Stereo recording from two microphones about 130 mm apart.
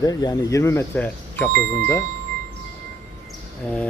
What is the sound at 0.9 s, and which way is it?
Speech, 15° left (ahead or behind).